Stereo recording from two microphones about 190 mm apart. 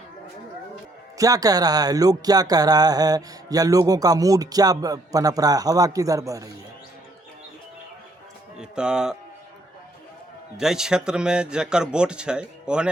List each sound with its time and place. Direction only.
1.2 s music: 20° right (ahead or behind)
8.5 s speech: 5° right (ahead or behind)
10.6 s speech: 5° right (ahead or behind)